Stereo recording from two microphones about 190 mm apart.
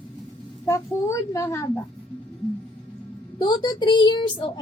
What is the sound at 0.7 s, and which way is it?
A child's voice, 15° left (ahead or behind).